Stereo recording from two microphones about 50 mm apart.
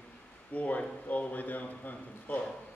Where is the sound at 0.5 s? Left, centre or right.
Left.